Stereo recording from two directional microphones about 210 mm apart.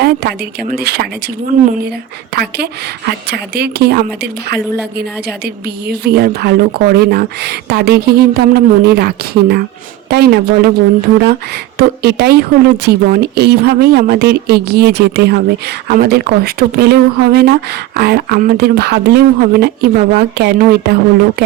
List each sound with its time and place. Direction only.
0.0 s a woman's voice: 50° right (ahead or behind)
1.5 s speech: 35° right (ahead or behind)
2.3 s a woman's voice: 50° right (ahead or behind)
11.8 s a woman's voice: 50° right (ahead or behind)